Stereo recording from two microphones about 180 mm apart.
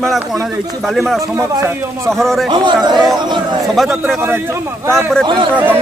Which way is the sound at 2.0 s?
Centre (ahead or behind).